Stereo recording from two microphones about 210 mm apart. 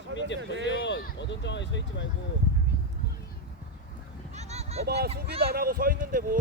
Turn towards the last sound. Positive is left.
turn(degrees=-40)  # may be behind; listen again after turning